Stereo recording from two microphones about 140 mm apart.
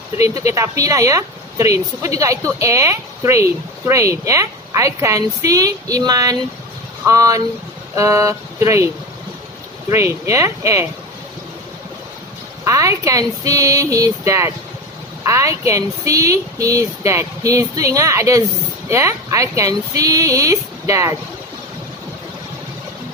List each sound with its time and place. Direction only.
0.2 s a woman's voice: 20° right (ahead or behind)
9.9 s a woman's voice: 20° right (ahead or behind)
12.6 s a woman's voice: 25° right (ahead or behind)